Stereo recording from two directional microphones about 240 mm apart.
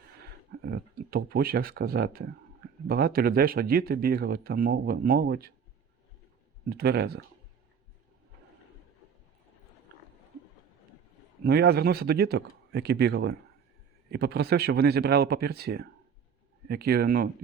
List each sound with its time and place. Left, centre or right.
0.6 s speech: right
6.7 s speech: right
11.4 s speech: right